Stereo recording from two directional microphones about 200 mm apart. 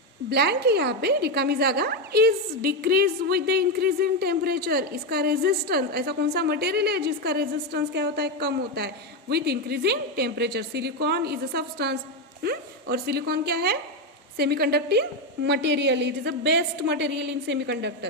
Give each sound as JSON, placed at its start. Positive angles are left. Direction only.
{"t": 0.3, "sound": "a woman's voice", "side_deg": -55}